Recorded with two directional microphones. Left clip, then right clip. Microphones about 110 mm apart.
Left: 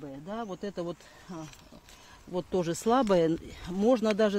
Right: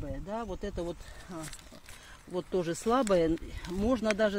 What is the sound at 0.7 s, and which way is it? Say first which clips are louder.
Speech: left 1 dB; 50° left (ahead or behind).